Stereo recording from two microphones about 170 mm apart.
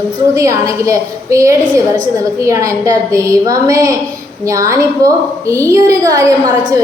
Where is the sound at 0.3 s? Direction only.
20° right (ahead or behind).